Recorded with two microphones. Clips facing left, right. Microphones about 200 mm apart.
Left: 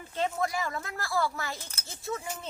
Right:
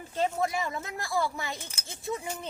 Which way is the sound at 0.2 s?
25° right (ahead or behind).